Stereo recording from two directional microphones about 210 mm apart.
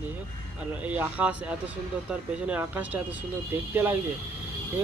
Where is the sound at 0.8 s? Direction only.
5° right (ahead or behind).